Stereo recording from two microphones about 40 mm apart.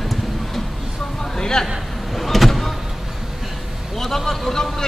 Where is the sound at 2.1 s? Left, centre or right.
Centre.